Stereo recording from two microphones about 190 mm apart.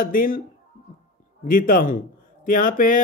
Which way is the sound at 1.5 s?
45° left (ahead or behind).